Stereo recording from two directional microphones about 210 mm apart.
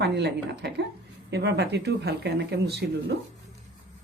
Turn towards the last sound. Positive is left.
turn(degrees=-50)  # may be behind; listen again after turning